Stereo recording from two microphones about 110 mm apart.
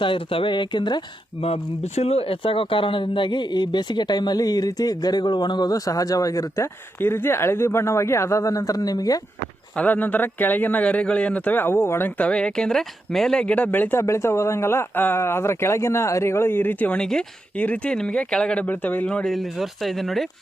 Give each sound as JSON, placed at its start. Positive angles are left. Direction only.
{"t": 0.0, "sound": "speech", "side_deg": 55}
{"t": 1.5, "sound": "speech", "side_deg": 65}
{"t": 9.7, "sound": "a man's voice", "side_deg": 15}
{"t": 17.0, "sound": "a man's voice", "side_deg": 5}